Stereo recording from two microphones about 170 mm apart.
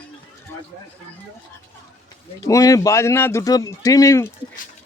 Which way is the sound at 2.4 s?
20° left (ahead or behind).